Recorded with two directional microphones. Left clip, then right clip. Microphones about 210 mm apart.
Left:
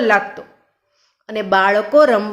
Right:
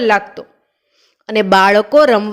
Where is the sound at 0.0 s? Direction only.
40° right (ahead or behind).